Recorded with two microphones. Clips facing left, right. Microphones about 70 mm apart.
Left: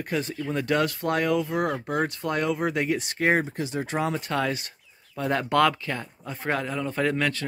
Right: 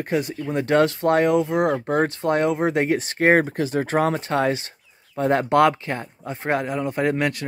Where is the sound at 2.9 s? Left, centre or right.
Right.